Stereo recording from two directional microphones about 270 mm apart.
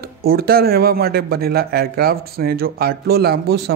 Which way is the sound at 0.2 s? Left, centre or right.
Right.